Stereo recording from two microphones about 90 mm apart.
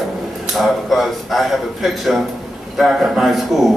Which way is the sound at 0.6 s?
Centre (ahead or behind).